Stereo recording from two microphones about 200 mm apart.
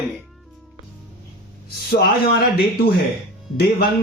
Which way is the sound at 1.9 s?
50° left (ahead or behind).